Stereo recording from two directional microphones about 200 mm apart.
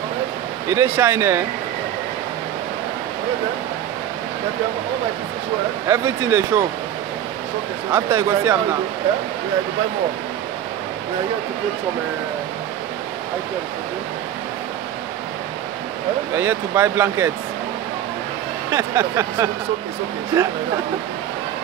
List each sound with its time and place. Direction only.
0.7 s speech: 10° right (ahead or behind)
5.9 s speech: 10° right (ahead or behind)
7.9 s speech: 15° right (ahead or behind)
16.3 s speech: 10° right (ahead or behind)
18.7 s speech: 15° right (ahead or behind)